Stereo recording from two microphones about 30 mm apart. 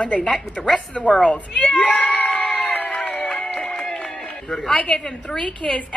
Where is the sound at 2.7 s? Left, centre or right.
Left.